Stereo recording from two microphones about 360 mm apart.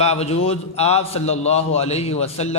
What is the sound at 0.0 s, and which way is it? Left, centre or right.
A man's voice, centre.